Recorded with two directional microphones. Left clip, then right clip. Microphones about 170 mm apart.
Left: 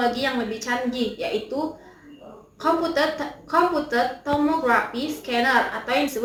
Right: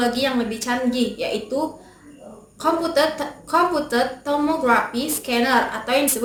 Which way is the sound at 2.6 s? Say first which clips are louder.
Right 2 dB; 30° right (ahead or behind).